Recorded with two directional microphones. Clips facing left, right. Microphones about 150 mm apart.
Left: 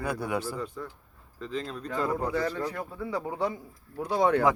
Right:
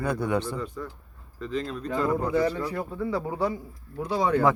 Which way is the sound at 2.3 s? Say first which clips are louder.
Right 5 dB; 15° right (ahead or behind).